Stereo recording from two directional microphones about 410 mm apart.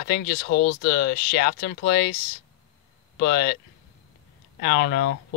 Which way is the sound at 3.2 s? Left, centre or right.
Left.